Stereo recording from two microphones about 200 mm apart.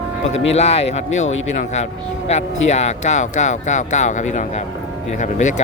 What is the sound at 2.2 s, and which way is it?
Speech, 35° left (ahead or behind).